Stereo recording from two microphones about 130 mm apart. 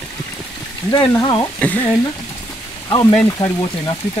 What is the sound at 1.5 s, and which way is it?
Speech, 10° left (ahead or behind).